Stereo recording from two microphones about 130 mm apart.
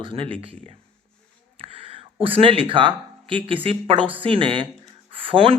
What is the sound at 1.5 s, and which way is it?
Speech, 45° right (ahead or behind).